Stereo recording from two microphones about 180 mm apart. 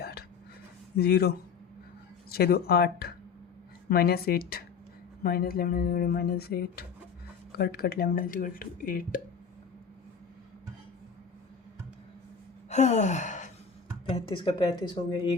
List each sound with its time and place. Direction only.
0.0 s a sound: 60° left (ahead or behind)
0.9 s speech: 60° left (ahead or behind)
12.6 s sigh: 40° left (ahead or behind)
14.1 s a woman's voice: 30° left (ahead or behind)